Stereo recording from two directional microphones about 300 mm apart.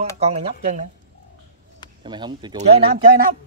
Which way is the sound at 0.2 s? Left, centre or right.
Right.